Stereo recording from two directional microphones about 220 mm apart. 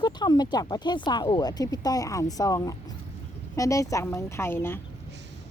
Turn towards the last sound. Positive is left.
turn(degrees=10)  # may be behind; listen again after turning